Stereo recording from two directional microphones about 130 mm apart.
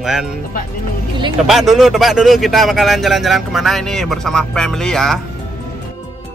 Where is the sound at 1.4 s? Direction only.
Centre (ahead or behind).